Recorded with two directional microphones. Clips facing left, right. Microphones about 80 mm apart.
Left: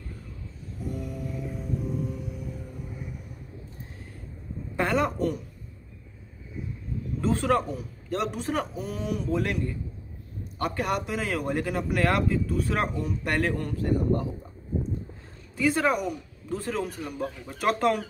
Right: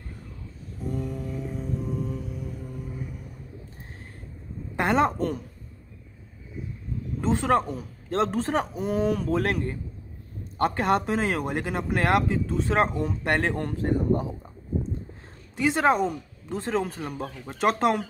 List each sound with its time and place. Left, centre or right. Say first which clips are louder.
0.9 s music: right 4 dB; right
4.7 s speech: right 3 dB; right
7.2 s a man's voice: right 2 dB; right
10.6 s a man's voice: right 5 dB; right
15.5 s a man's voice: right 2 dB; right